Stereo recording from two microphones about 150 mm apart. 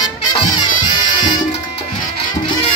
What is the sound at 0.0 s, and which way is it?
Music, 25° left (ahead or behind).